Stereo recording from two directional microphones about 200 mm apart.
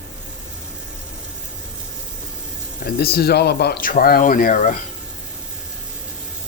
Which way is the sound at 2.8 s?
50° left (ahead or behind).